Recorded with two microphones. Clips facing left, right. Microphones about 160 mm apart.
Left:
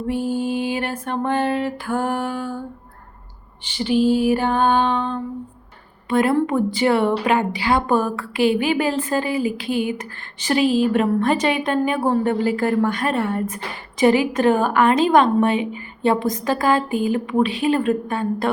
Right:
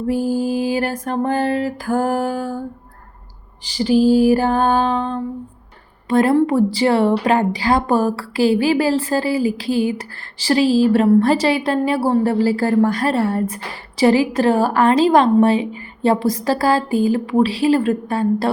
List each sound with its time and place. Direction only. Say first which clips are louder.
0.1 s a woman's voice: right 3 dB; 35° right (ahead or behind)
3.8 s a woman's voice: right 4 dB; 35° right (ahead or behind)